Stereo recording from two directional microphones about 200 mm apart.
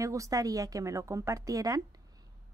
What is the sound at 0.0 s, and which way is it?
A woman's voice, 15° right (ahead or behind).